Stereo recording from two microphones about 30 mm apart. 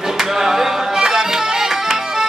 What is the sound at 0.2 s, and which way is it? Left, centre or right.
Music, centre.